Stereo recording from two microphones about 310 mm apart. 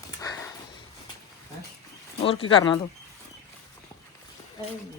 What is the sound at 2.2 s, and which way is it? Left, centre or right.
Speech, centre.